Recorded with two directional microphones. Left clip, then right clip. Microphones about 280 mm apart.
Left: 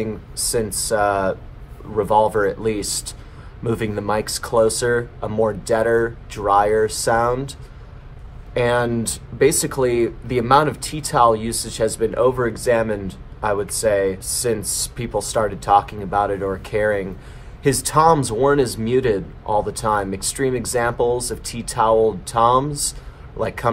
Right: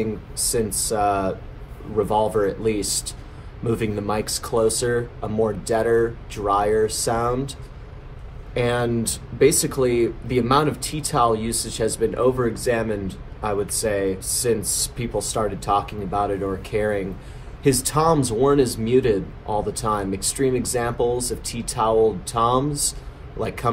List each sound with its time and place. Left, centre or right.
0.0 s speech: centre
8.5 s speech: centre